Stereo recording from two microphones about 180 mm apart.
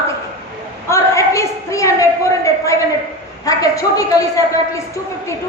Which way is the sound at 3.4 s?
20° left (ahead or behind).